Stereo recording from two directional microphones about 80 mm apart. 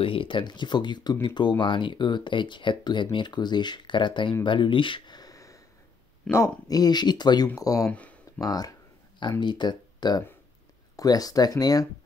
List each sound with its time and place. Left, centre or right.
0.2 s speech: left
1.6 s speech: left
6.3 s speech: centre
6.7 s speech: left
7.5 s speech: left
9.4 s speech: left